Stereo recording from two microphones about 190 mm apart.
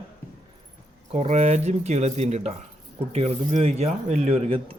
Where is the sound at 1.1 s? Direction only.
35° right (ahead or behind).